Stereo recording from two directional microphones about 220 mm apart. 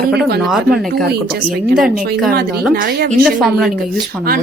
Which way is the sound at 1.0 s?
45° right (ahead or behind).